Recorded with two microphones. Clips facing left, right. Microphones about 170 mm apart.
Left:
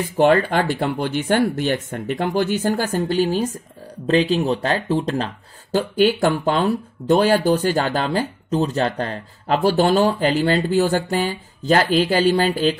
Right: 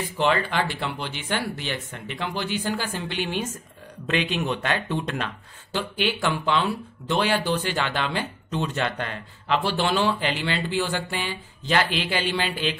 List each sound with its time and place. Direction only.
0.0 s speech: 50° left (ahead or behind)